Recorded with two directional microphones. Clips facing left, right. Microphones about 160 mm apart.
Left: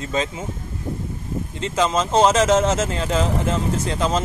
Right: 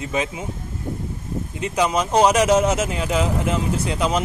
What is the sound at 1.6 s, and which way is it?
Speech, 15° right (ahead or behind).